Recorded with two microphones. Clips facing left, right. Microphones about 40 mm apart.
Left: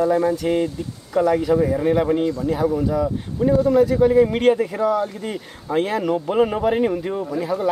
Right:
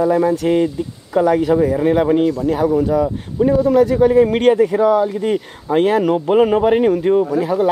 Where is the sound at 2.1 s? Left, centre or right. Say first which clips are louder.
Right 5 dB; right.